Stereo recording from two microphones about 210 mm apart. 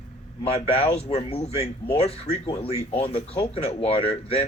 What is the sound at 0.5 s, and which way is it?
Speech, 30° left (ahead or behind).